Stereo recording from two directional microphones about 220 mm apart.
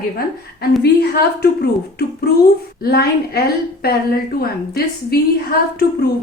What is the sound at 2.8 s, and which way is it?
Speech, 45° left (ahead or behind).